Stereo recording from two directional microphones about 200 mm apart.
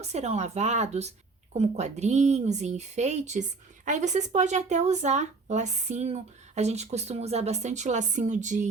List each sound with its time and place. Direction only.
0.0 s a woman's voice: 35° right (ahead or behind)